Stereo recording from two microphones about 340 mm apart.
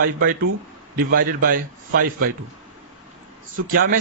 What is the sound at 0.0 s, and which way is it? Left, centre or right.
A man's voice, right.